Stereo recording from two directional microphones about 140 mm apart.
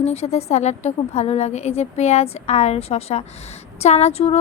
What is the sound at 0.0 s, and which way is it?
A woman's voice, 50° left (ahead or behind).